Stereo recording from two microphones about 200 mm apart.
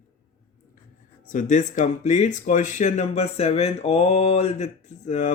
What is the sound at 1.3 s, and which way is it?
Speech, 40° left (ahead or behind).